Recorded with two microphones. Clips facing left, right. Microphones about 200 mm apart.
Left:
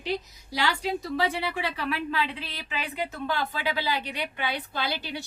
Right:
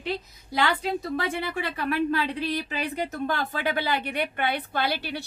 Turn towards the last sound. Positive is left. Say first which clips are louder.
# right 3 dB
turn(degrees=-55)  # may be behind; listen again after turning